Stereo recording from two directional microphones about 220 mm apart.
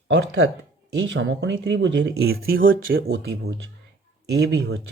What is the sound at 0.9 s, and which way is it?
Speech, 55° right (ahead or behind).